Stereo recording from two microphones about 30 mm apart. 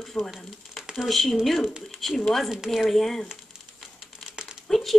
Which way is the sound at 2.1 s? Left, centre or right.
Centre.